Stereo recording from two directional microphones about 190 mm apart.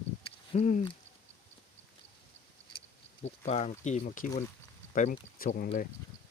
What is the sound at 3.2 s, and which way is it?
Speech, 35° left (ahead or behind).